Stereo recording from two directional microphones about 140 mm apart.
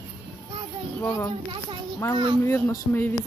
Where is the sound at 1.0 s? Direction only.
15° left (ahead or behind).